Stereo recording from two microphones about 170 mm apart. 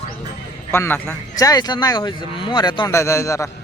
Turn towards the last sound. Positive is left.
turn(degrees=15)  # may be behind; listen again after turning